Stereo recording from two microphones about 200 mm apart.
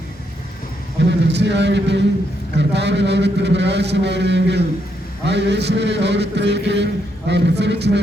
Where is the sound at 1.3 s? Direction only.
60° right (ahead or behind).